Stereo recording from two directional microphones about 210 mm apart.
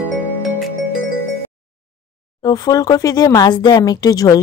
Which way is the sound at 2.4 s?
15° left (ahead or behind).